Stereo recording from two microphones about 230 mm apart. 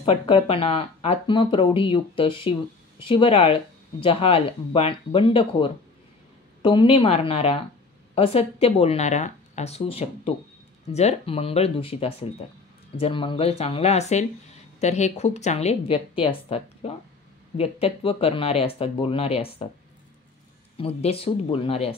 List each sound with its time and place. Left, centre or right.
0.0 s speech: left
20.7 s speech: left